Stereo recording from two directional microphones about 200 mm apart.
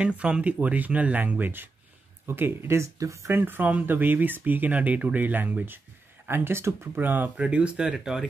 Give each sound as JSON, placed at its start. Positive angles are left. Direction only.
{"t": 0.0, "sound": "speech", "side_deg": -5}